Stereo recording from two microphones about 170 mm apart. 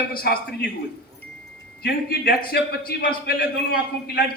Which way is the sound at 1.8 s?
70° left (ahead or behind).